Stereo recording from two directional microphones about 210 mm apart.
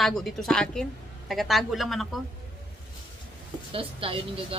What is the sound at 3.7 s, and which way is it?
Speech, 25° right (ahead or behind).